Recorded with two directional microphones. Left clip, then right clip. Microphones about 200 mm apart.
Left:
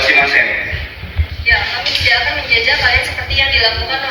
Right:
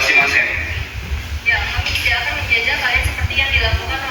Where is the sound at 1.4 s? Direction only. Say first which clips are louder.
Left 4 dB; 50° left (ahead or behind).